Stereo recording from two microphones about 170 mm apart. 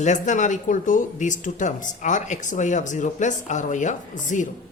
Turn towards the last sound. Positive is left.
turn(degrees=45)  # may be behind; listen again after turning